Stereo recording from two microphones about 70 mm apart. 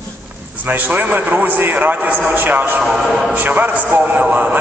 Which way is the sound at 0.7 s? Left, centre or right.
Right.